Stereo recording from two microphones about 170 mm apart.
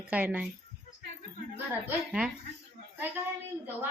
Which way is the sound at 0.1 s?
10° right (ahead or behind).